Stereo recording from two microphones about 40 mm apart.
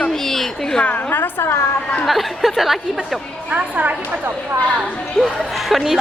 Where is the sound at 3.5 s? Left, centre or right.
Right.